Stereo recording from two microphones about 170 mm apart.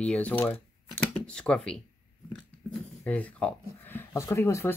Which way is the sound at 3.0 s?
10° left (ahead or behind).